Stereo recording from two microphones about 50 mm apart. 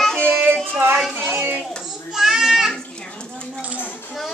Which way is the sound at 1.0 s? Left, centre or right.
Centre.